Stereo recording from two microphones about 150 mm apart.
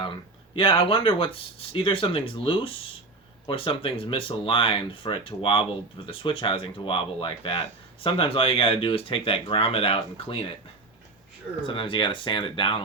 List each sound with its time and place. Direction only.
0.5 s speech: 35° left (ahead or behind)
11.6 s speech: 35° left (ahead or behind)